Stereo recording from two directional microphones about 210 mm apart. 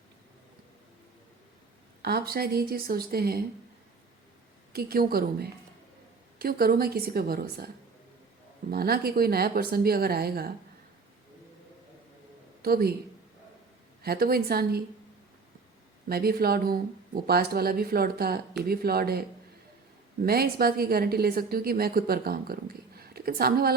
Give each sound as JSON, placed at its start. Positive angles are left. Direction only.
{"t": 2.0, "sound": "a woman's voice", "side_deg": -45}
{"t": 4.7, "sound": "a woman's voice", "side_deg": -45}
{"t": 8.7, "sound": "a woman's voice", "side_deg": -45}
{"t": 12.6, "sound": "a woman's voice", "side_deg": -45}
{"t": 14.0, "sound": "a woman's voice", "side_deg": -45}
{"t": 16.0, "sound": "a woman's voice", "side_deg": -45}
{"t": 20.2, "sound": "a woman's voice", "side_deg": -45}